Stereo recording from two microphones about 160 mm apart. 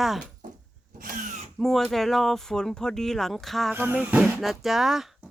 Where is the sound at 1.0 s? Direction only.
60° right (ahead or behind).